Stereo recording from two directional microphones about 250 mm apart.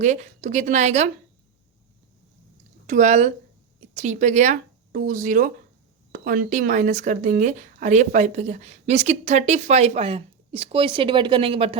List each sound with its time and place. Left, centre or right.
0.0 s speech: right
2.8 s speech: right